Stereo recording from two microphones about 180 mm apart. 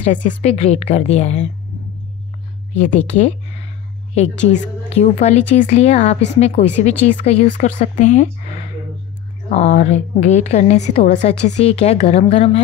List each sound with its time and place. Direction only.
0.0 s a woman's voice: 45° left (ahead or behind)
2.9 s a woman's voice: 40° left (ahead or behind)
9.5 s a woman's voice: 40° left (ahead or behind)